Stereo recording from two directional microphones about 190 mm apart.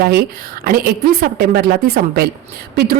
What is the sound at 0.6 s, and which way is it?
A woman's voice, 50° right (ahead or behind).